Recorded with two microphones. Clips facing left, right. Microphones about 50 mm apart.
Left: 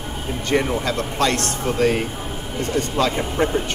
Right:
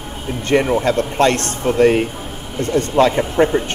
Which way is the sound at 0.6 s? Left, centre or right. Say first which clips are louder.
Right 6 dB; right.